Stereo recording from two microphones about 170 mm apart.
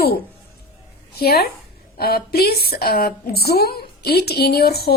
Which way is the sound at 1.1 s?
65° left (ahead or behind).